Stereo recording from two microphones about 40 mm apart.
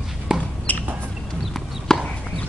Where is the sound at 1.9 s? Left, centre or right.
Centre.